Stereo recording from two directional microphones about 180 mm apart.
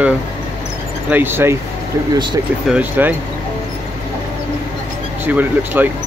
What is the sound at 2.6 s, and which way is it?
Speech, 10° right (ahead or behind).